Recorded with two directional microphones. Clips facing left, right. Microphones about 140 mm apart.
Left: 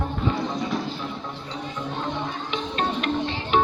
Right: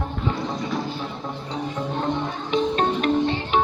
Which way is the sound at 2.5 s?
35° right (ahead or behind).